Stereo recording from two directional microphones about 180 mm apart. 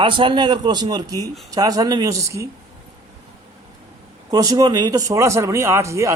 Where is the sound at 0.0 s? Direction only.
25° right (ahead or behind).